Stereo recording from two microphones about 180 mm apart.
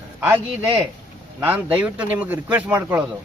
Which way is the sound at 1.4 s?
10° right (ahead or behind).